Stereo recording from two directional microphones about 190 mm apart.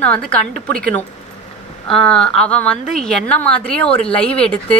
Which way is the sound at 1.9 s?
30° left (ahead or behind).